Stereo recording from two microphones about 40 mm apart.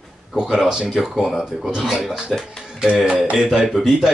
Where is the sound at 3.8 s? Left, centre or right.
Centre.